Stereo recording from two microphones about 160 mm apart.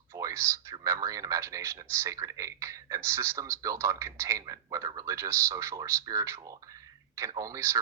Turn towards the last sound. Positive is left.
turn(degrees=-20)  # may be behind; listen again after turning